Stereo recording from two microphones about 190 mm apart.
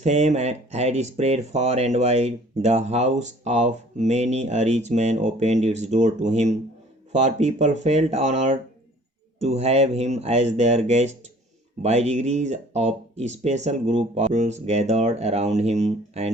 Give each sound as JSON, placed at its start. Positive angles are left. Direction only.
{"t": 0.0, "sound": "speech", "side_deg": -35}